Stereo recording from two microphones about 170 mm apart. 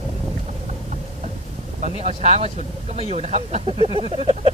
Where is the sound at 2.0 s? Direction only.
35° right (ahead or behind).